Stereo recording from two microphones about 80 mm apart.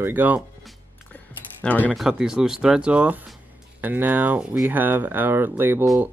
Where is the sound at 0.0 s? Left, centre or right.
Right.